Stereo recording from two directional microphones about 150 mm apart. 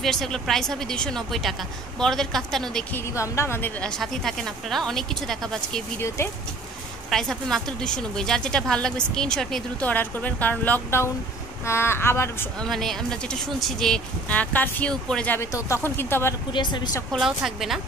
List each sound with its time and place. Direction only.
0.0 s a woman's voice: 5° left (ahead or behind)
3.0 s a woman's voice: 20° left (ahead or behind)
5.9 s speech: 20° left (ahead or behind)
7.1 s a woman's voice: 5° left (ahead or behind)
12.5 s a woman's voice: centre (ahead or behind)
16.5 s speech: 30° left (ahead or behind)
17.1 s a woman's voice: centre (ahead or behind)